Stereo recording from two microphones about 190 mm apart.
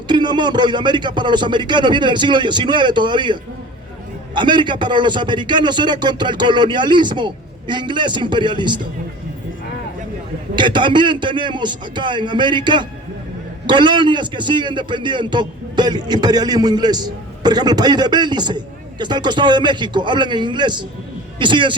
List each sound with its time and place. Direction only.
0.1 s a man's voice: 25° right (ahead or behind)
4.4 s a man's voice: 25° right (ahead or behind)
10.5 s a man's voice: 25° right (ahead or behind)